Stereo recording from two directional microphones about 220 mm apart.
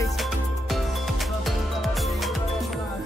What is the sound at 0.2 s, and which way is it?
Music, centre (ahead or behind).